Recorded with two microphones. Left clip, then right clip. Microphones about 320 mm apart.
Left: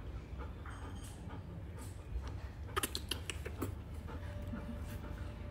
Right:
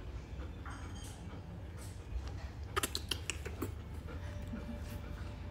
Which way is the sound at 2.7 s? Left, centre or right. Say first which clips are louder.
Right 2 dB; centre.